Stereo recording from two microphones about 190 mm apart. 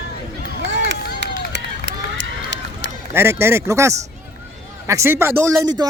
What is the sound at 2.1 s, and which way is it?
Run, 65° right (ahead or behind).